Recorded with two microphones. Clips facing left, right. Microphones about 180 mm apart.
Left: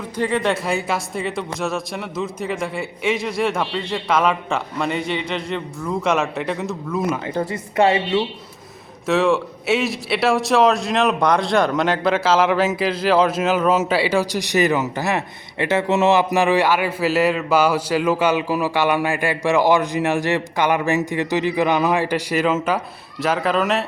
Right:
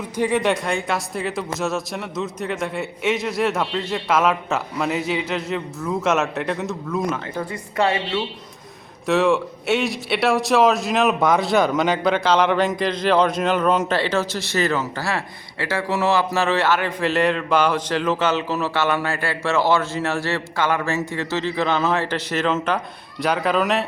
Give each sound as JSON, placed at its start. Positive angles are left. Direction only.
{"t": 0.2, "sound": "speech", "side_deg": -15}
{"t": 0.4, "sound": "speech", "side_deg": 5}
{"t": 7.3, "sound": "a woman's voice", "side_deg": 20}
{"t": 9.0, "sound": "a man's voice", "side_deg": 0}